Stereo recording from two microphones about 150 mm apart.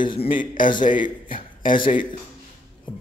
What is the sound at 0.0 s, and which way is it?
Speech, 35° left (ahead or behind).